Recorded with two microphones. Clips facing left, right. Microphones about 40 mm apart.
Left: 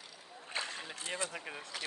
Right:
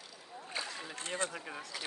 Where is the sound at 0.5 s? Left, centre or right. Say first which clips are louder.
Left 1 dB; left.